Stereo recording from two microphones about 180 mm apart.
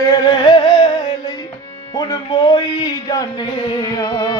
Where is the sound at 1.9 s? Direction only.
20° left (ahead or behind).